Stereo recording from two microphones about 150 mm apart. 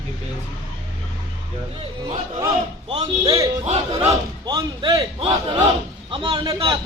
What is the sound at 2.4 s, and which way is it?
Speech, 30° right (ahead or behind).